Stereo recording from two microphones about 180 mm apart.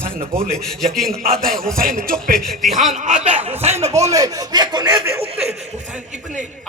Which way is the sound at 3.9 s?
15° right (ahead or behind).